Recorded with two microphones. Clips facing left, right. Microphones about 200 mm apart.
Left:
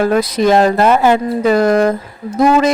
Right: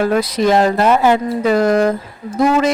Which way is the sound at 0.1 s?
45° left (ahead or behind).